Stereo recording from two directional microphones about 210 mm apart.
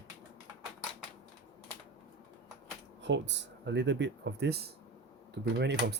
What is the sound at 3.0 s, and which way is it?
Speech, 55° right (ahead or behind).